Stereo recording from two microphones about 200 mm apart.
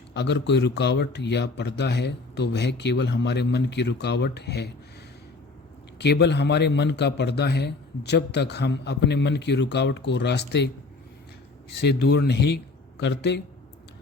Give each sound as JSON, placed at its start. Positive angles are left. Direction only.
{"t": 0.1, "sound": "a man's voice", "side_deg": 60}
{"t": 6.0, "sound": "a man's voice", "side_deg": 55}
{"t": 11.7, "sound": "a man's voice", "side_deg": 55}